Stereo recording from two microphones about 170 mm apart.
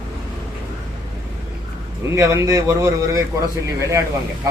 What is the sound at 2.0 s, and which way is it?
A man's voice, 15° right (ahead or behind).